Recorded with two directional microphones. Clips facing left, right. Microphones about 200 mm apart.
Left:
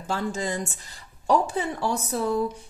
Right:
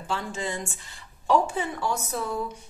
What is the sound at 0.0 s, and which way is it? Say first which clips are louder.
A woman's voice: left 3 dB; 40° left (ahead or behind).